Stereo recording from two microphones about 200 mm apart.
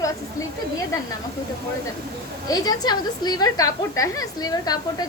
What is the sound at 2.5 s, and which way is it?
A woman's voice, 20° left (ahead or behind).